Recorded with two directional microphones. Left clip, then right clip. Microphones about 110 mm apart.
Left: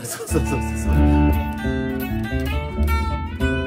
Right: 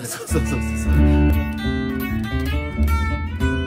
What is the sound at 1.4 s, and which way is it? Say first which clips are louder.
Music: even; 55° left (ahead or behind).